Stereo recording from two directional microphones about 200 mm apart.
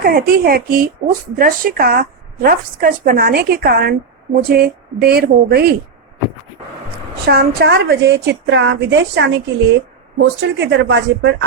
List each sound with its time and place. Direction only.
0.0 s a woman's voice: 50° right (ahead or behind)
7.3 s a woman's voice: 55° right (ahead or behind)